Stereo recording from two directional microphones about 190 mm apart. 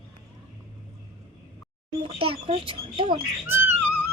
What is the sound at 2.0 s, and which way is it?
Speech, 30° right (ahead or behind).